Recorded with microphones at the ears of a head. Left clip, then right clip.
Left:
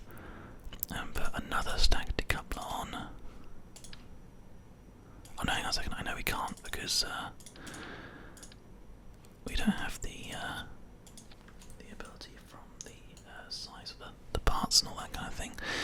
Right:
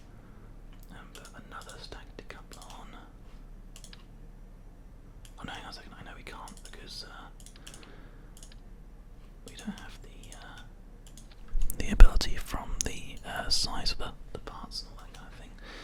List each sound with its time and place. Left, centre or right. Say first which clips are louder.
0.2 s whispering: left 7 dB; left
5.4 s whispering: left 9 dB; left
9.5 s whispering: left 9 dB; left
11.7 s whispering: right 17 dB; right
14.3 s whispering: left 15 dB; left